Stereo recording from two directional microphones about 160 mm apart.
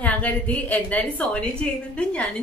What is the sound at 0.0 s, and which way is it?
A woman's voice, 10° left (ahead or behind).